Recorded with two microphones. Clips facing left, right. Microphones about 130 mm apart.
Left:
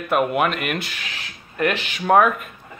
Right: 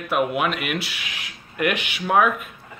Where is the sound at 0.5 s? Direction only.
5° right (ahead or behind).